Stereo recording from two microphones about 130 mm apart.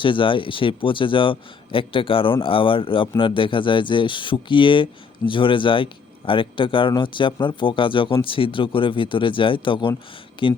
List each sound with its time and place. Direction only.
0.0 s speech: 40° left (ahead or behind)